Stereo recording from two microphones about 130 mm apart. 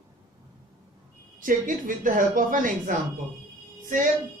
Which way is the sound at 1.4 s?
90° right.